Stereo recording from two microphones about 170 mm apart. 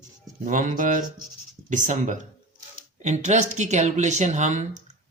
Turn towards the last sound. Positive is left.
turn(degrees=-45)  # may be behind; listen again after turning